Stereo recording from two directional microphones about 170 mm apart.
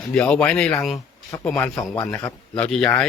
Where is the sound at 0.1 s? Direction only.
5° left (ahead or behind).